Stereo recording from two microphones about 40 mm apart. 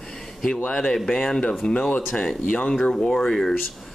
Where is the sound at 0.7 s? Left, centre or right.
Centre.